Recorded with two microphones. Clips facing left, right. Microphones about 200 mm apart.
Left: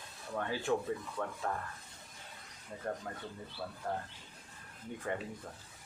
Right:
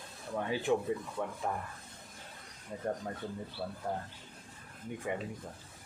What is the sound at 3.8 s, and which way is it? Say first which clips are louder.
Speech: right 1 dB; 15° right (ahead or behind).